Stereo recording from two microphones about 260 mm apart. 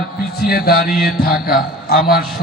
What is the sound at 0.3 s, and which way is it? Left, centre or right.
Mantra, left.